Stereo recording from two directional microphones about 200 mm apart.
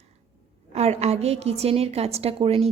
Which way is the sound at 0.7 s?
30° right (ahead or behind).